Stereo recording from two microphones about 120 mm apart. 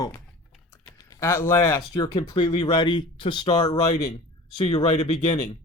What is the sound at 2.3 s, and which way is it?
Speech, 45° left (ahead or behind).